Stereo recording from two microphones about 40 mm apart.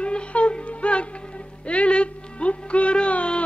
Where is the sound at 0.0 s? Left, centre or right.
Left.